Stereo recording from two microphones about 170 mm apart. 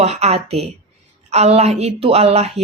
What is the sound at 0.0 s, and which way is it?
A woman's voice, 40° right (ahead or behind).